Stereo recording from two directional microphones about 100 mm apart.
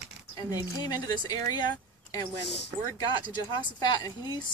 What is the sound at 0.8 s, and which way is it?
Speech, 40° left (ahead or behind).